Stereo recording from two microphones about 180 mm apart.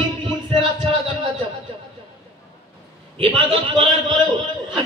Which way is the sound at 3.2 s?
25° right (ahead or behind).